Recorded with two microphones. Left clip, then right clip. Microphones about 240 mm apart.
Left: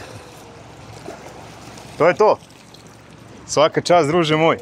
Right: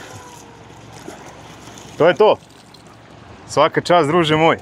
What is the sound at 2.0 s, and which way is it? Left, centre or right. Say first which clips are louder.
Speech: right 2 dB; centre.